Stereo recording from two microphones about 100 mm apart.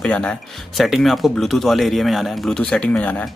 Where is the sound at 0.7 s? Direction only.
Centre (ahead or behind).